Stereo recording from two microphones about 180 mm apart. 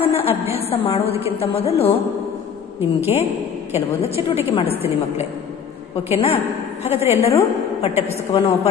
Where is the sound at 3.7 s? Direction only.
35° left (ahead or behind).